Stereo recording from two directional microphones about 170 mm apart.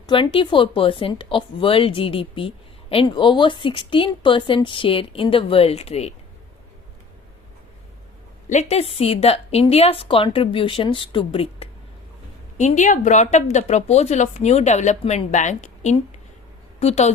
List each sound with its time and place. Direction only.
0.0 s speech: 30° left (ahead or behind)
8.4 s speech: 40° left (ahead or behind)
12.5 s speech: 45° left (ahead or behind)